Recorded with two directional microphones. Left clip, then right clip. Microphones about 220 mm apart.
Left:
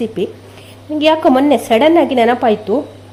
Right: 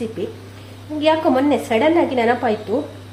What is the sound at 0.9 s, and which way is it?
A woman's voice, 45° left (ahead or behind).